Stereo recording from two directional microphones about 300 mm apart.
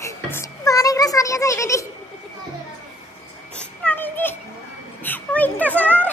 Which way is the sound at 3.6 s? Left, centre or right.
Centre.